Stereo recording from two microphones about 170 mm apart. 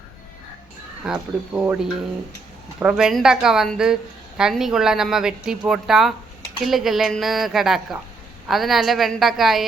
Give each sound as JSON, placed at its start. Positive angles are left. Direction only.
{"t": 1.0, "sound": "a woman's voice", "side_deg": -5}